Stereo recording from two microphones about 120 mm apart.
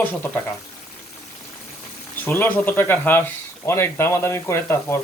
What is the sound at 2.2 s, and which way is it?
Speech, 15° left (ahead or behind).